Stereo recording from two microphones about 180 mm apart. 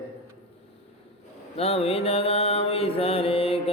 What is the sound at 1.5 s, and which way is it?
Mantra, 35° left (ahead or behind).